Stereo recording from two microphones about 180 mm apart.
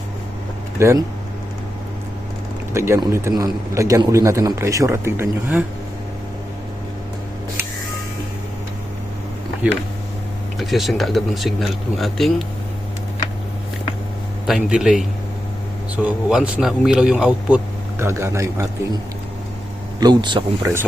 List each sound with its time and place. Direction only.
0.8 s a man's voice: 15° right (ahead or behind)
2.7 s a man's voice: 15° right (ahead or behind)
10.6 s speech: centre (ahead or behind)
14.4 s speech: centre (ahead or behind)
16.0 s a man's voice: 5° right (ahead or behind)
20.0 s speech: 25° right (ahead or behind)